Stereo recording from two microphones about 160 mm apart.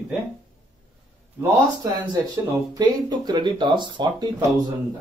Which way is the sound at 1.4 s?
20° right (ahead or behind).